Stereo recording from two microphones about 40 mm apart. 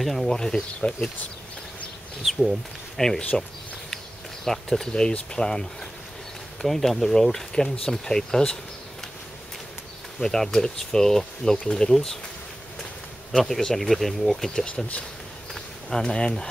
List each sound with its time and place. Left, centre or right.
0.0 s speech: centre
3.0 s speech: centre
4.6 s speech: left
10.2 s speech: centre
11.9 s speech: centre
13.3 s speech: centre
15.9 s speech: centre